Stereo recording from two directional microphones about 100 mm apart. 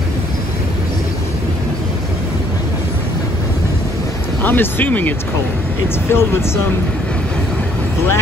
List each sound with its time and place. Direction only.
4.4 s speech: 20° left (ahead or behind)
6.1 s speech: 25° left (ahead or behind)